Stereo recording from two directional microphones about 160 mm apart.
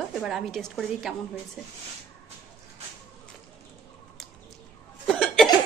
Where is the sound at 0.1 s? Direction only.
5° right (ahead or behind).